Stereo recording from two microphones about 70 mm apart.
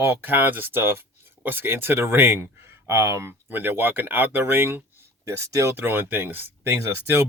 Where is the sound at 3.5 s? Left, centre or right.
Right.